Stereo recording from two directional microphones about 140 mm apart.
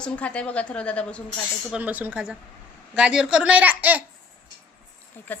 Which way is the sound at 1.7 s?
10° right (ahead or behind).